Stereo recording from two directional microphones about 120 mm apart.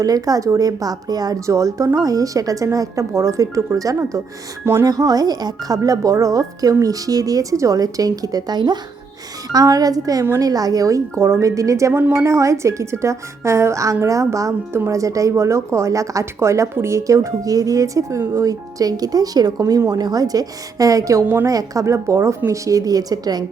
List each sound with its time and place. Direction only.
0.0 s a woman's voice: 30° right (ahead or behind)